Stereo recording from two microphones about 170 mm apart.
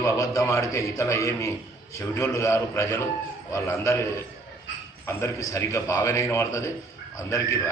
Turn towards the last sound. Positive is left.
turn(degrees=15)  # may be behind; listen again after turning